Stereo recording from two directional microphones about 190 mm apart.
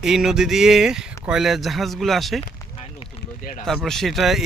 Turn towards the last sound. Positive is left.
turn(degrees=0)  # may be behind; listen again after turning